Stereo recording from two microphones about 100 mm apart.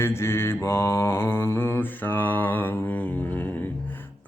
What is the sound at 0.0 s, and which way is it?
Mantra, 25° left (ahead or behind).